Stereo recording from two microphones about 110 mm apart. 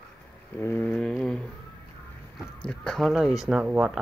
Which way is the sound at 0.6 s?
20° left (ahead or behind).